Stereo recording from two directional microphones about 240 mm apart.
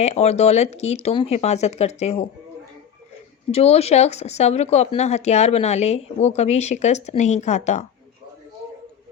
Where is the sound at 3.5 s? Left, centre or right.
Left.